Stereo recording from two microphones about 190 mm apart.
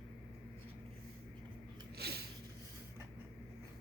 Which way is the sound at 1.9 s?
55° right (ahead or behind).